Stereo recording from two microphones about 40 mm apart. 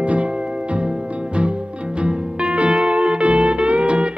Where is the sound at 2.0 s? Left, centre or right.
Right.